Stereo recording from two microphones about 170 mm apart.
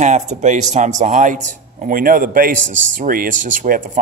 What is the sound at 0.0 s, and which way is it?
Speech, 45° right (ahead or behind).